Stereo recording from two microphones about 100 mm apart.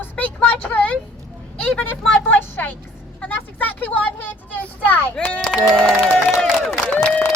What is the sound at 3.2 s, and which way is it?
Speech, 15° left (ahead or behind).